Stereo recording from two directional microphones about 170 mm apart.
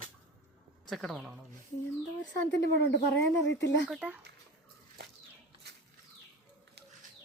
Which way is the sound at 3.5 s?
90° left.